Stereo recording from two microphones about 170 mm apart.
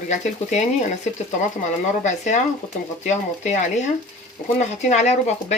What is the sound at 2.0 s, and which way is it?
A woman's voice, 45° left (ahead or behind).